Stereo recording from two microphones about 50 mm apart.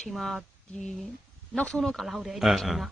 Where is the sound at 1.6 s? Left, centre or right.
Centre.